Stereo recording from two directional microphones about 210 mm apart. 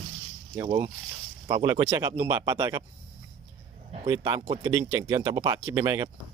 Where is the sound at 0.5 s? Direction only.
15° right (ahead or behind).